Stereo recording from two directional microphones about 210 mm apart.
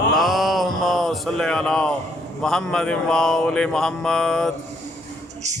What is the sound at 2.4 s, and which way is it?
Mantra, 5° left (ahead or behind).